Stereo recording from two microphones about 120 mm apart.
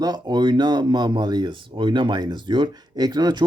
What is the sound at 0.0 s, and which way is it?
Speech, 35° right (ahead or behind).